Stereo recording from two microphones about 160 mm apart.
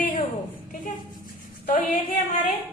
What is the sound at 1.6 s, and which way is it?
Speech, 55° left (ahead or behind).